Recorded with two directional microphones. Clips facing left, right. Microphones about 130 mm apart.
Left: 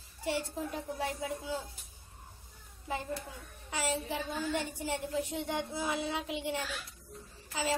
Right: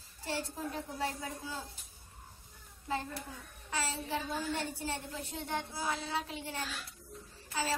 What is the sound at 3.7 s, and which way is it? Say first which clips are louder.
Speech: left 2 dB; 15° left (ahead or behind).